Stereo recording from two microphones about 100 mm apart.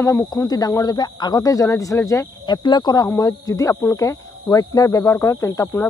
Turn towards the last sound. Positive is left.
turn(degrees=30)  # may be behind; listen again after turning